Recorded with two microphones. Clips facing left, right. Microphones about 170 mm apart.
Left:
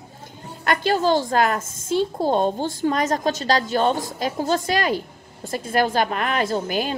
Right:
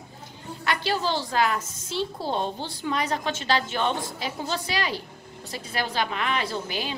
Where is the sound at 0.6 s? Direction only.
45° left (ahead or behind).